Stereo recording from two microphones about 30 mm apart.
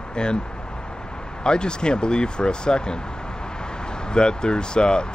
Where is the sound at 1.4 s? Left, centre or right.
Left.